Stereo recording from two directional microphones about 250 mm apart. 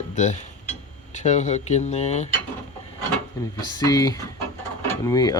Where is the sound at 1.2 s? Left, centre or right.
Left.